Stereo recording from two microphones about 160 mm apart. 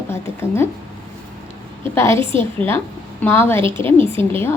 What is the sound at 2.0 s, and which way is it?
A woman's voice, 15° left (ahead or behind).